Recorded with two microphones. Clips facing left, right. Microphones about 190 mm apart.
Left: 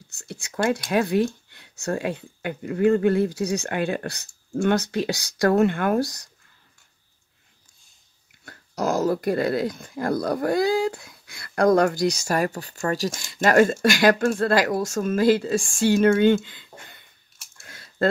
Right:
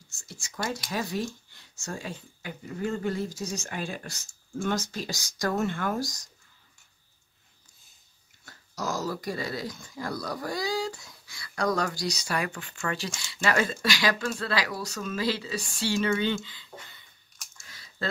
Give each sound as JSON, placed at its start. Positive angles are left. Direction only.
{"t": 0.1, "sound": "speech", "side_deg": 65}
{"t": 8.5, "sound": "speech", "side_deg": 55}
{"t": 17.6, "sound": "a sound", "side_deg": 55}